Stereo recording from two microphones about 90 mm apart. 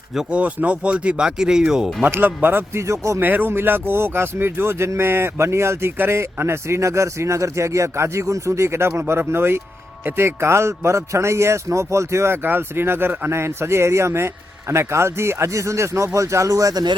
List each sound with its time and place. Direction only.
0.1 s speech: 10° right (ahead or behind)
2.0 s speech: 25° right (ahead or behind)
3.2 s speech: 20° right (ahead or behind); by 16.9 s 45° right (ahead or behind)